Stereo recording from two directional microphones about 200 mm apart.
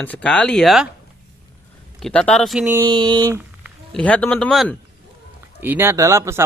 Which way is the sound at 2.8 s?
25° right (ahead or behind).